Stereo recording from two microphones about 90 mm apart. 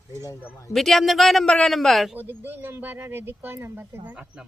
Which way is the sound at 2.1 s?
20° right (ahead or behind).